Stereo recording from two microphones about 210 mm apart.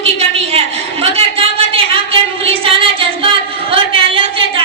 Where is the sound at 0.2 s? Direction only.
30° right (ahead or behind).